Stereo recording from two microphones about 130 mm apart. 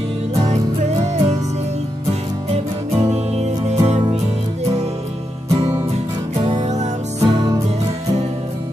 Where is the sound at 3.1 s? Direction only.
60° right (ahead or behind).